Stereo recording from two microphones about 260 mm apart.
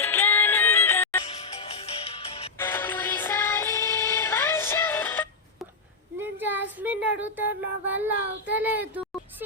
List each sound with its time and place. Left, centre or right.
0.0 s music: centre
1.3 s music: left
2.6 s music: centre
6.1 s a sound: centre